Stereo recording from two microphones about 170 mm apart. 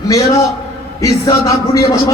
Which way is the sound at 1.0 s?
20° left (ahead or behind).